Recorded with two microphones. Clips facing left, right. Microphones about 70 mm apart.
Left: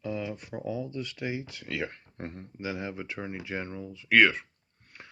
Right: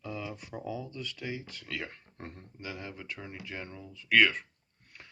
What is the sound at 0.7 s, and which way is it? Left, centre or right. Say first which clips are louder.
Speech: left 6 dB; centre.